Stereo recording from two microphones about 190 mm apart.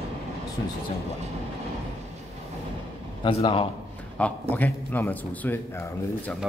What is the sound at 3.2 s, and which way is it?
Speech, 25° left (ahead or behind).